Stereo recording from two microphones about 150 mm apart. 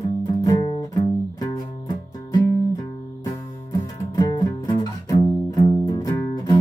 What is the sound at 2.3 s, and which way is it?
Music, 20° left (ahead or behind).